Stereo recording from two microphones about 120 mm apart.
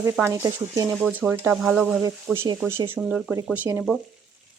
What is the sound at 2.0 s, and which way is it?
Speech, 20° right (ahead or behind).